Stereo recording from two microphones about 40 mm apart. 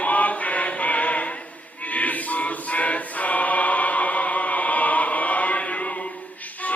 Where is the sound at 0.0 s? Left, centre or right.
Left.